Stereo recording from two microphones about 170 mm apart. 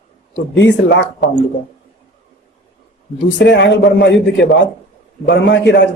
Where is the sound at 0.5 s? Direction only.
90° left.